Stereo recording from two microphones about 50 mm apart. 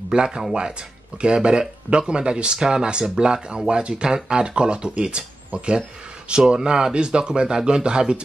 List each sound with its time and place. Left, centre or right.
0.1 s speech: centre